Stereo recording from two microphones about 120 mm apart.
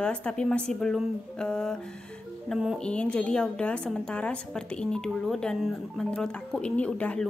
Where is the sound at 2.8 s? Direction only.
10° left (ahead or behind).